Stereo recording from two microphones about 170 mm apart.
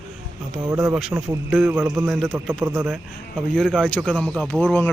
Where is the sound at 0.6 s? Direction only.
15° right (ahead or behind).